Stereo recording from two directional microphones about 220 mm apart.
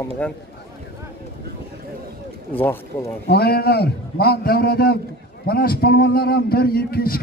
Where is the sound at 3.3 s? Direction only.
45° left (ahead or behind).